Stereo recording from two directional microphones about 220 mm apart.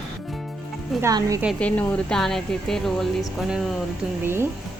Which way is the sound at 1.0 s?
15° right (ahead or behind).